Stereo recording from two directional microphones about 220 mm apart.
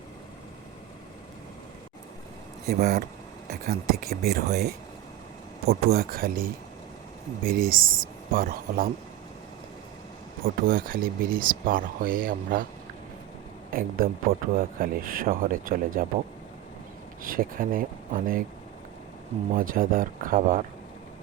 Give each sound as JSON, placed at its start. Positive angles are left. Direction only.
{"t": 2.6, "sound": "speech", "side_deg": -45}
{"t": 4.0, "sound": "speech", "side_deg": -45}
{"t": 10.4, "sound": "speech", "side_deg": -40}
{"t": 13.7, "sound": "speech", "side_deg": -40}
{"t": 17.2, "sound": "speech", "side_deg": -40}
{"t": 19.5, "sound": "speech", "side_deg": -40}